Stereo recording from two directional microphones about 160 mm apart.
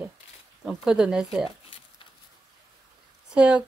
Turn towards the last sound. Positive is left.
turn(degrees=-5)  # may be behind; listen again after turning